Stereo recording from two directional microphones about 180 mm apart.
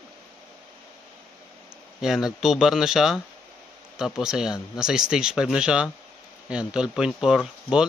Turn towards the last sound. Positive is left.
turn(degrees=-5)  # may be behind; listen again after turning